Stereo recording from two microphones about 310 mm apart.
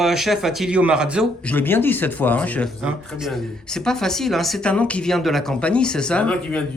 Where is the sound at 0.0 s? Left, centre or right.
Centre.